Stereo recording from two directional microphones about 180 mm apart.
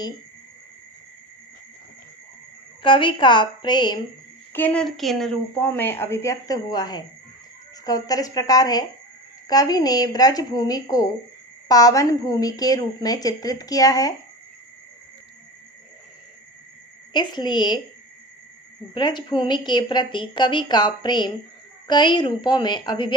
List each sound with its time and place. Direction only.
2.8 s a woman's voice: 30° left (ahead or behind)
4.5 s a woman's voice: 10° left (ahead or behind)
5.7 s a woman's voice: 10° left (ahead or behind)
17.1 s a woman's voice: 25° left (ahead or behind)
18.9 s a woman's voice: 25° left (ahead or behind)